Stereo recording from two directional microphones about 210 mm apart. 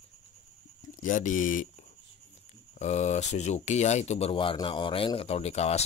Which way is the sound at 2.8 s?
35° left (ahead or behind).